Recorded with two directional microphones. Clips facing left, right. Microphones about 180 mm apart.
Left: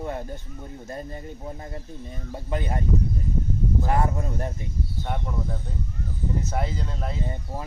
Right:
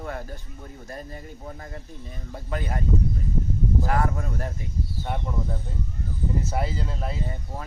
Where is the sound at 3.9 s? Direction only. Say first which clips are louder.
Left 1 dB; 20° left (ahead or behind).